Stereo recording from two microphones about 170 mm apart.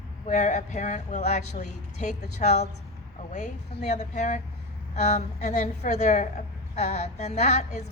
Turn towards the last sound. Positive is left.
turn(degrees=40)  # may be behind; listen again after turning